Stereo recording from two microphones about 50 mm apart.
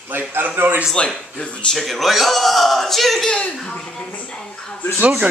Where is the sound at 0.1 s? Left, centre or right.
Right.